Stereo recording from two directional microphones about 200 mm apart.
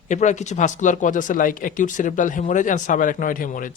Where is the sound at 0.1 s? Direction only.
35° left (ahead or behind).